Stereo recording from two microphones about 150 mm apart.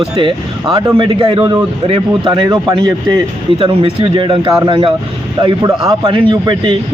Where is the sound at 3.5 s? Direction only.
35° right (ahead or behind).